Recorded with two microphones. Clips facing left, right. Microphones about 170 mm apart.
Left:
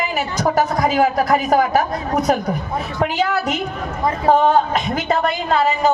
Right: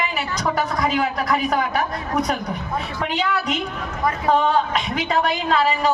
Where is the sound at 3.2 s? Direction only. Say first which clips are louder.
Left 3 dB; 45° left (ahead or behind).